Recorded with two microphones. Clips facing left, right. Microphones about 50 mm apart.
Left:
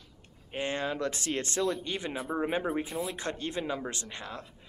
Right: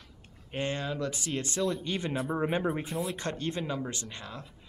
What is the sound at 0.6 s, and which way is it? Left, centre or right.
Speech, centre.